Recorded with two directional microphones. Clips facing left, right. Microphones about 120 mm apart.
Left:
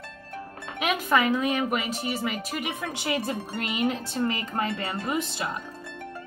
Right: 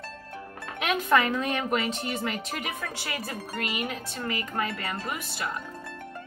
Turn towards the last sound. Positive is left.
turn(degrees=20)  # may be behind; listen again after turning